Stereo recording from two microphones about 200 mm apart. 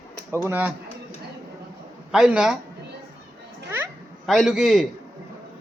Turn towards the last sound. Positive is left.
turn(degrees=0)  # may be behind; listen again after turning